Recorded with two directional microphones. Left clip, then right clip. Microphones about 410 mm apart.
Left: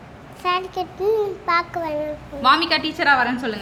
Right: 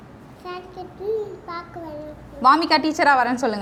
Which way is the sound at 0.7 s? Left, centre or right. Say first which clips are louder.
Left 6 dB; left.